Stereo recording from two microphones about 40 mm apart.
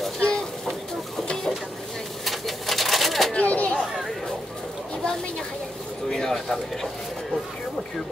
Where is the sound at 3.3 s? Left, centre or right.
Left.